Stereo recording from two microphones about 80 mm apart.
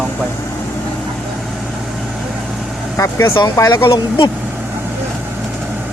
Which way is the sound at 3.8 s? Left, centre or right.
Left.